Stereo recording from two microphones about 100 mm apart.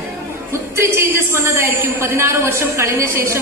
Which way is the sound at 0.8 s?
25° right (ahead or behind).